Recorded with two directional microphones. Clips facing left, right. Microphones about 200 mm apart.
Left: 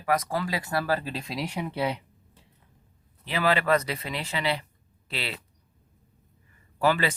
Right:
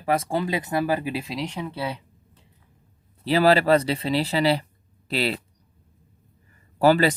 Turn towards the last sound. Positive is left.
turn(degrees=-40)  # may be behind; listen again after turning